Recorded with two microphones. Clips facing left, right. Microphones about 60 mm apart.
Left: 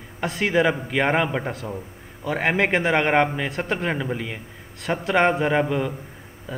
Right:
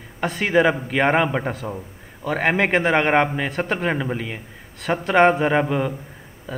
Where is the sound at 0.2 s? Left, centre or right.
Centre.